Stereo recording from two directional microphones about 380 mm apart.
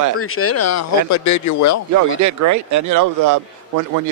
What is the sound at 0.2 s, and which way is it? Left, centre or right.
Speech, left.